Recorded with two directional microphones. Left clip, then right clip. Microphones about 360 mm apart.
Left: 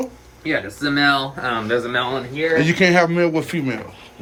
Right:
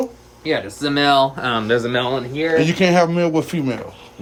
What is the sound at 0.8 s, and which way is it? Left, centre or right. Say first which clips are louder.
Speech: even; right.